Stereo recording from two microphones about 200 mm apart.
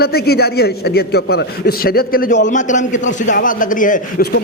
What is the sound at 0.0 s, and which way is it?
Speech, 50° left (ahead or behind).